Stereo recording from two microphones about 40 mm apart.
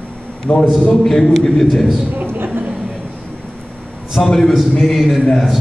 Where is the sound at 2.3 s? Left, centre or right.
Right.